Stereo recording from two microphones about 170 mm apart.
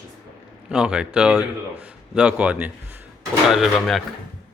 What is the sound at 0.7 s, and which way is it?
A man's voice, 5° right (ahead or behind).